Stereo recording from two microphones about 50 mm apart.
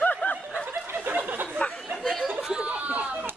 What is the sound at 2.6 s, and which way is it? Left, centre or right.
Chatter, right.